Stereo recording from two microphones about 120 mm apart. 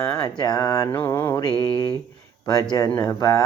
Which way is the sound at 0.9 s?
15° left (ahead or behind).